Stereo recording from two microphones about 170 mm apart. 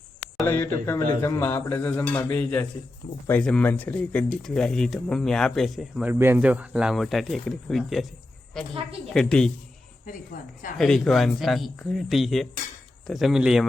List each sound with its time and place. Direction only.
0.4 s speech: 15° left (ahead or behind)
6.1 s speech: 10° right (ahead or behind); by 9.5 s 5° left (ahead or behind)
10.3 s a woman's voice: 50° left (ahead or behind)
10.8 s speech: 5° left (ahead or behind)